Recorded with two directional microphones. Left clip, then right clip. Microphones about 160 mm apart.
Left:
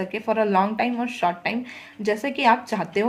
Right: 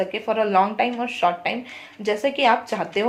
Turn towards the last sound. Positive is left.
turn(degrees=30)  # may be behind; listen again after turning